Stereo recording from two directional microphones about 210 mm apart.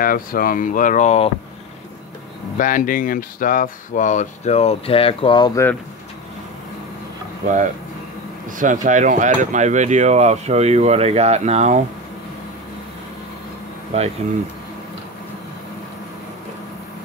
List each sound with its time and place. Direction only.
0.0 s speech: 45° left (ahead or behind)
2.5 s speech: 40° left (ahead or behind); by 5.8 s 15° left (ahead or behind)
8.5 s speech: 40° right (ahead or behind)
13.9 s speech: 30° right (ahead or behind)